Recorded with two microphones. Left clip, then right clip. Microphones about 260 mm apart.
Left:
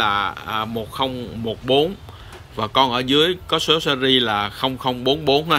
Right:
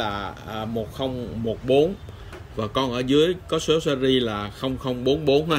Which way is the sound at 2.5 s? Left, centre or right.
Centre.